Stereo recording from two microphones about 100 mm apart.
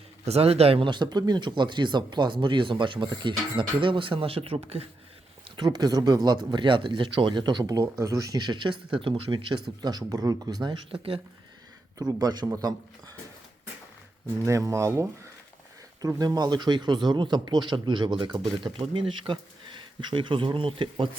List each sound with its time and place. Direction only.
0.3 s a man's voice: 90° right
0.9 s speech: 45° right (ahead or behind); by 4.9 s 85° right
5.5 s speech: 45° right (ahead or behind); by 9.6 s 60° right (ahead or behind)
9.8 s speech: 40° right (ahead or behind)
14.4 s speech: 30° right (ahead or behind)
16.0 s speech: 40° right (ahead or behind); by 20.9 s 60° right (ahead or behind)